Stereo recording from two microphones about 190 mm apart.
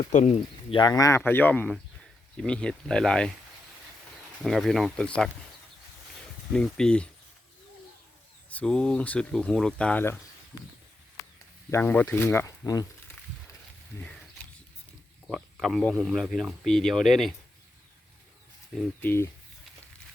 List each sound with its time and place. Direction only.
0.1 s speech: 40° left (ahead or behind)
0.7 s speech: 20° left (ahead or behind); by 3.3 s 5° left (ahead or behind)
4.4 s speech: centre (ahead or behind)
6.5 s speech: 5° left (ahead or behind)
8.4 s speech: 5° left (ahead or behind)
11.7 s speech: 10° left (ahead or behind)
15.3 s speech: centre (ahead or behind)
18.7 s speech: centre (ahead or behind)